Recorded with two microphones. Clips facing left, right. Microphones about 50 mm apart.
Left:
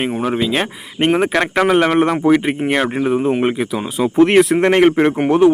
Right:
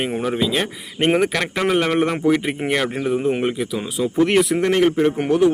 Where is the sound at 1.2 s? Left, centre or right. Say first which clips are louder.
Left 4 dB; left.